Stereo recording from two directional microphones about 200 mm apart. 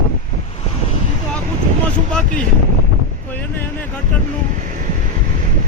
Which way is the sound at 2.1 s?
5° left (ahead or behind).